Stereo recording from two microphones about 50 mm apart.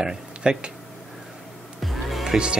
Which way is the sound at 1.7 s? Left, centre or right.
Centre.